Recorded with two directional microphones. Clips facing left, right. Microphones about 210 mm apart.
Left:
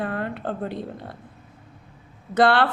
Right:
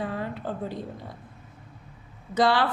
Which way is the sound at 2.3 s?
60° left (ahead or behind).